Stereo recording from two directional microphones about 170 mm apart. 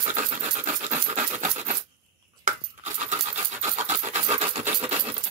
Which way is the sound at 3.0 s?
40° right (ahead or behind).